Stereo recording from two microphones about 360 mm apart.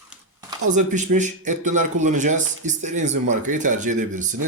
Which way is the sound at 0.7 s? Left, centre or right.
Centre.